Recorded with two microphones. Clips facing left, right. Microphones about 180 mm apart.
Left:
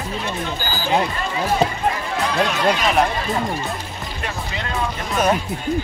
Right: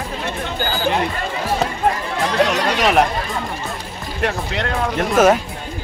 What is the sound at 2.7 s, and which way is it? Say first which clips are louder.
Speech: right 3 dB; 75° right (ahead or behind).